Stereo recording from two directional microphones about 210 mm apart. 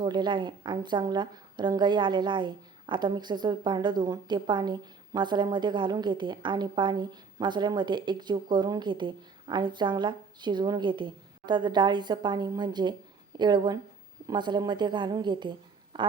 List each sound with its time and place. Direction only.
0.0 s speech: 20° right (ahead or behind)